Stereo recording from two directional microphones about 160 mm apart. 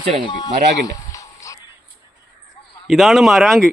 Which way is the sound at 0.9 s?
20° left (ahead or behind).